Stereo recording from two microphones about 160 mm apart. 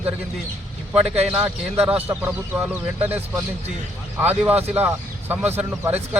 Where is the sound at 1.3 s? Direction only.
10° right (ahead or behind).